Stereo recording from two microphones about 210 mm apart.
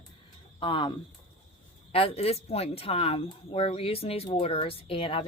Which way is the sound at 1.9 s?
25° left (ahead or behind).